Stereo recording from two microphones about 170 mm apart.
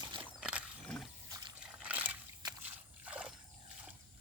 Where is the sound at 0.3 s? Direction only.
5° right (ahead or behind).